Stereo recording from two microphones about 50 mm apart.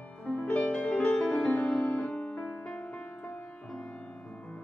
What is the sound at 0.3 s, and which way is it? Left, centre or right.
Music, left.